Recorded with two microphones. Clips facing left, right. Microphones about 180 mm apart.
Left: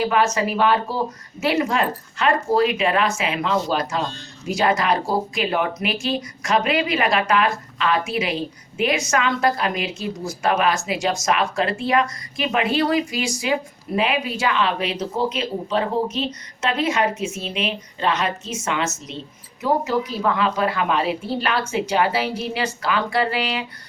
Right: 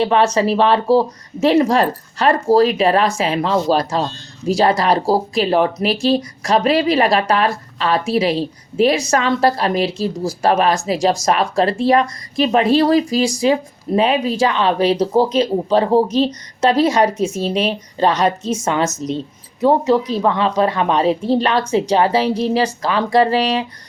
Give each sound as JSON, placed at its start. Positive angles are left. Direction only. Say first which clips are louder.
{"t": 0.0, "sound": "speech", "louder": "right 5 dB", "side_deg": -30}